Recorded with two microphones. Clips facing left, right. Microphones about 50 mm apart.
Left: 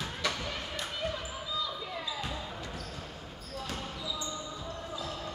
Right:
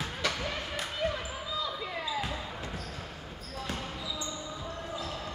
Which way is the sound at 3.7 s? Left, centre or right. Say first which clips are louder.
Right 1 dB; centre.